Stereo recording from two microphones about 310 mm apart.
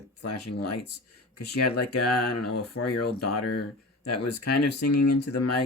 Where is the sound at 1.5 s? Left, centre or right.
Left.